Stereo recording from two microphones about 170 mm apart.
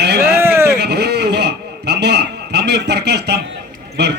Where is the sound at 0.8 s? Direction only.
75° right (ahead or behind).